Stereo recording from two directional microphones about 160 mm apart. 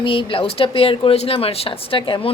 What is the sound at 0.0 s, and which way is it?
Speech, 35° left (ahead or behind).